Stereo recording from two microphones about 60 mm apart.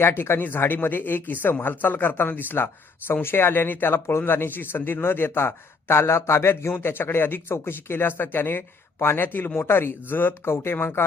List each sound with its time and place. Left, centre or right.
0.0 s speech: left